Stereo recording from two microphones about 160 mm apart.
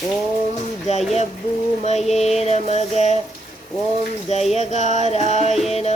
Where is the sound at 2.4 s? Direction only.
45° left (ahead or behind).